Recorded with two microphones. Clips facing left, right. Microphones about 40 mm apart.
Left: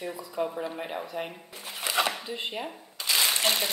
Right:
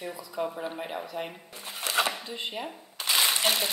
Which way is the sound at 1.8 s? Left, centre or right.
Centre.